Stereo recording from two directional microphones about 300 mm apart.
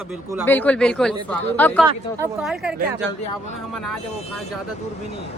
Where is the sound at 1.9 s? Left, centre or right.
Centre.